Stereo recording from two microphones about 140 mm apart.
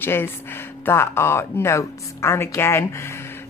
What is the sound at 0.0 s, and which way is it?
A woman's voice, 15° left (ahead or behind).